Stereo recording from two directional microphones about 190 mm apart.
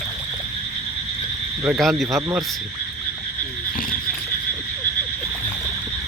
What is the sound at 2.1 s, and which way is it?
Speech, 15° right (ahead or behind).